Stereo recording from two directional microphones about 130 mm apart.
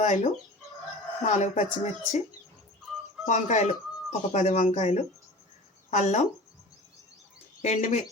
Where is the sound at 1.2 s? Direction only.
70° left (ahead or behind).